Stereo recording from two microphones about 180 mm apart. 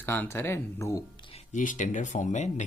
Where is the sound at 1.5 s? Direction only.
45° left (ahead or behind).